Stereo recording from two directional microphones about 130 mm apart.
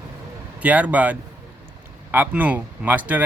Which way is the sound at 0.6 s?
10° right (ahead or behind).